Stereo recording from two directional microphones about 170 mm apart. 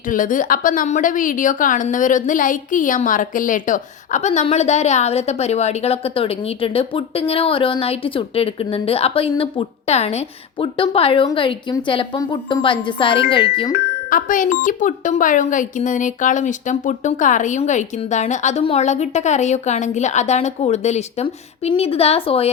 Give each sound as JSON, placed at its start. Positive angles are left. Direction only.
{"t": 0.1, "sound": "a woman's voice", "side_deg": 50}
{"t": 13.7, "sound": "a woman's voice", "side_deg": 55}